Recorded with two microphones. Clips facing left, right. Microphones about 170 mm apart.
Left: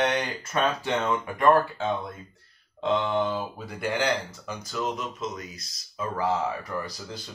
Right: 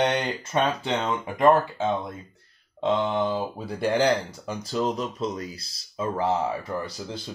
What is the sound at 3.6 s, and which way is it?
Speech, 35° right (ahead or behind).